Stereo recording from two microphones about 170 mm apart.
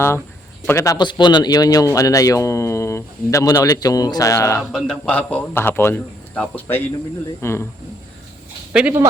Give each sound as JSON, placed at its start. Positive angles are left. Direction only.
{"t": 0.7, "sound": "a man's voice", "side_deg": 20}
{"t": 4.7, "sound": "a man's voice", "side_deg": 0}
{"t": 8.7, "sound": "speech", "side_deg": -10}